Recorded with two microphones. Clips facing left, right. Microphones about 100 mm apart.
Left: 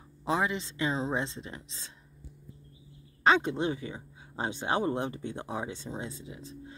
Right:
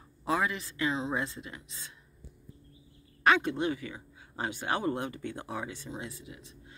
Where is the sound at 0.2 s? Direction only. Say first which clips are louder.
Left 1 dB; 20° left (ahead or behind).